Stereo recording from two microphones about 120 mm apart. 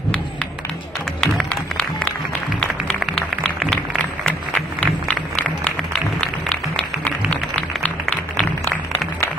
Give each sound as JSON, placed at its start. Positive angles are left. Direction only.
{"t": 1.2, "sound": "music", "side_deg": 5}